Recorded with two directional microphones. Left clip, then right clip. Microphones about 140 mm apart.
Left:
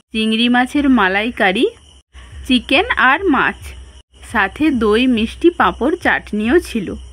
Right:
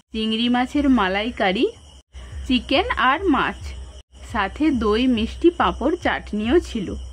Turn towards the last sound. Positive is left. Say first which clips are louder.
# left 5 dB
turn(degrees=35)  # may be behind; listen again after turning